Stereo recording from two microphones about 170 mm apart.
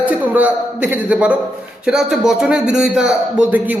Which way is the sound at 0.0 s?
10° right (ahead or behind).